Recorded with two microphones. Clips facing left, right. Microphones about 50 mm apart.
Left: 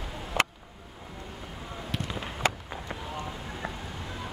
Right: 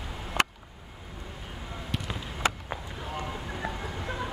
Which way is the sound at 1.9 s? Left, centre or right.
Centre.